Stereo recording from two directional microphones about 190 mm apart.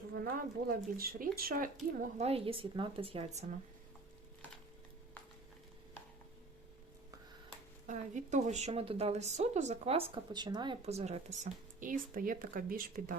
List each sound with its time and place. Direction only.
0.1 s speech: 50° right (ahead or behind)
2.0 s a woman's voice: 35° right (ahead or behind)
7.9 s speech: 40° right (ahead or behind)